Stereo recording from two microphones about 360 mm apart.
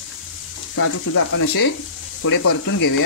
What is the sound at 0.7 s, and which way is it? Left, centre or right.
Frying, left.